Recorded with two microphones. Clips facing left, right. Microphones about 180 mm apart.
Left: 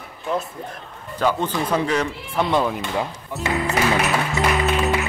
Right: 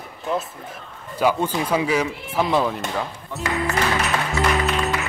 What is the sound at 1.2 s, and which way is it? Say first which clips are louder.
Speech: right 1 dB; 10° right (ahead or behind).